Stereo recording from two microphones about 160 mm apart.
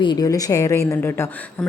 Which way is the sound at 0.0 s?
25° left (ahead or behind).